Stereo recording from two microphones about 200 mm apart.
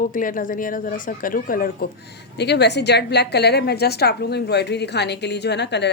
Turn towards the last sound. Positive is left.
turn(degrees=60)  # may be behind; listen again after turning